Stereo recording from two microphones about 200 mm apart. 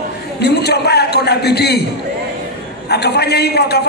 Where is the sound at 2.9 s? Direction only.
55° left (ahead or behind).